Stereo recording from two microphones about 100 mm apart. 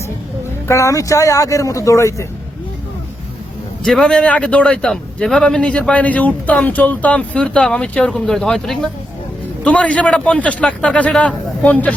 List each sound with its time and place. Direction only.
0.7 s speech: 30° left (ahead or behind)
3.8 s a man's voice: 5° left (ahead or behind)